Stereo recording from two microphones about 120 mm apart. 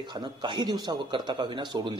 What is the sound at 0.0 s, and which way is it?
A man's voice, 40° right (ahead or behind).